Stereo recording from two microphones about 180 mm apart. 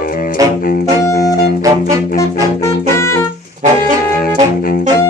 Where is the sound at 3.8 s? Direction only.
55° left (ahead or behind).